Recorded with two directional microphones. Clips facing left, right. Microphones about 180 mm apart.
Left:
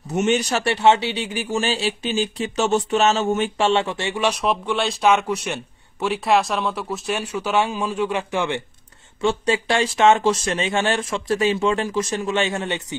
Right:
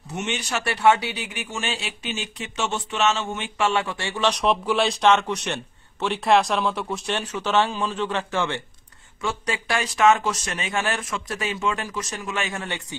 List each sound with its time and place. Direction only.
0.1 s speech: 40° left (ahead or behind)
0.7 s speech: 25° left (ahead or behind)
9.2 s speech: 30° left (ahead or behind)